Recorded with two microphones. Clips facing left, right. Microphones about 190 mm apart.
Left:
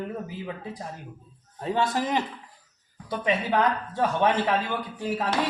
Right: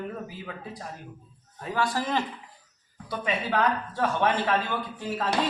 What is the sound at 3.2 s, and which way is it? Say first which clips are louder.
A man's voice: left 2 dB; 20° left (ahead or behind).